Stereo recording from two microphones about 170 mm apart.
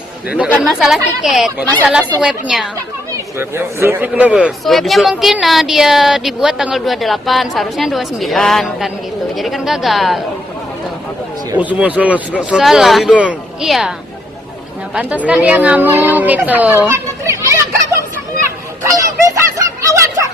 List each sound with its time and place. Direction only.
0.6 s a man's voice: centre (ahead or behind)
3.3 s a man's voice: 15° right (ahead or behind)
11.5 s a man's voice: 10° right (ahead or behind)
14.9 s a woman's voice: 5° right (ahead or behind)
16.9 s children playing: 15° right (ahead or behind)
18.9 s a sound: 20° right (ahead or behind)